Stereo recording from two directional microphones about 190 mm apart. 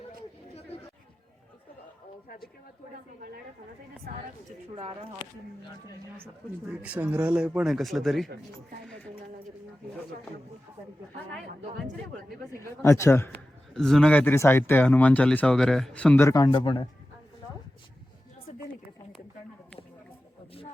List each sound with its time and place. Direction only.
2.2 s a sound: 50° left (ahead or behind)
3.2 s a woman's voice: 50° right (ahead or behind)
4.7 s speech: 30° right (ahead or behind)
6.8 s speech: 5° right (ahead or behind)
12.5 s speech: 15° left (ahead or behind)
13.7 s speech: centre (ahead or behind); by 16.8 s 25° left (ahead or behind)